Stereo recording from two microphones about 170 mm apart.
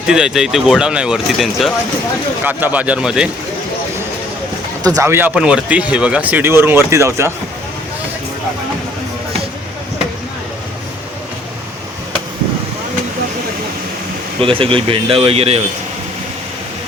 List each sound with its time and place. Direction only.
0.1 s speech: 5° right (ahead or behind)
4.8 s speech: 20° right (ahead or behind)
14.4 s speech: 30° right (ahead or behind)